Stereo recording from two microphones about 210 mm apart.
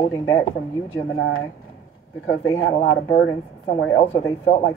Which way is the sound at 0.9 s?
75° left (ahead or behind).